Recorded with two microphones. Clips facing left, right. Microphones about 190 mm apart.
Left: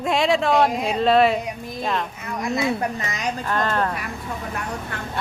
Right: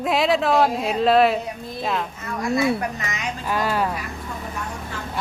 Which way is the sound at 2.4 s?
20° left (ahead or behind).